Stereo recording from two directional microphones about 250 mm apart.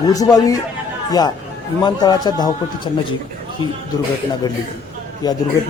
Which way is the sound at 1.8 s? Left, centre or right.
Centre.